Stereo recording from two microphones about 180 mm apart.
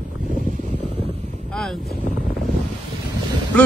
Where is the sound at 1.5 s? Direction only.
Centre (ahead or behind).